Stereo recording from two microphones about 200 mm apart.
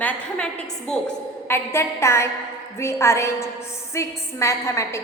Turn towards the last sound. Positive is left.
turn(degrees=15)  # may be behind; listen again after turning